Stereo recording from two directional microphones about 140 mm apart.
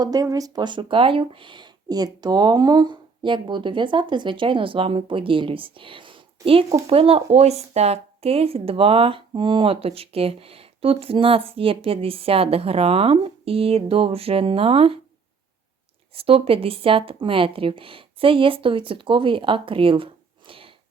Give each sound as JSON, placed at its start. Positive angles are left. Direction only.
{"t": 0.0, "sound": "speech", "side_deg": -25}
{"t": 16.1, "sound": "speech", "side_deg": -40}